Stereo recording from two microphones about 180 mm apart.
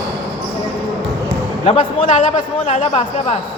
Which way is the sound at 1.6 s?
45° left (ahead or behind).